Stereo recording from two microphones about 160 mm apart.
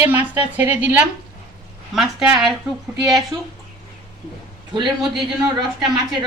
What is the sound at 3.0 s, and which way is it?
Speech, 25° right (ahead or behind).